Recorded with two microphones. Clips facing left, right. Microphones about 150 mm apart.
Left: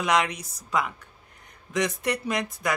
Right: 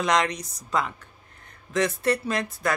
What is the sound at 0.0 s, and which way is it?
Speech, 10° left (ahead or behind).